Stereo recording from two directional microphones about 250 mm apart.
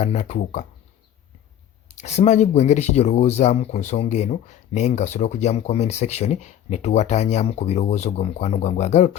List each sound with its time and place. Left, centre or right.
0.0 s speech: left
2.0 s speech: left